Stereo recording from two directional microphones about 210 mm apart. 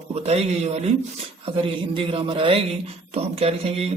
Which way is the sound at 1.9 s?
25° right (ahead or behind).